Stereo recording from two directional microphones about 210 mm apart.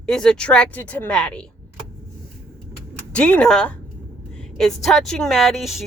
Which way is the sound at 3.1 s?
5° left (ahead or behind).